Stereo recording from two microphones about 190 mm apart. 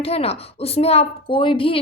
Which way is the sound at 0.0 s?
30° left (ahead or behind).